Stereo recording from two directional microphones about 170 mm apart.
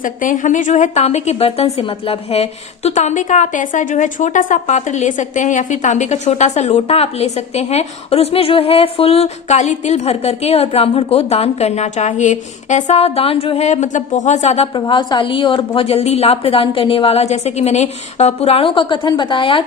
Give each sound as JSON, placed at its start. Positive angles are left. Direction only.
{"t": 0.0, "sound": "a woman's voice", "side_deg": 50}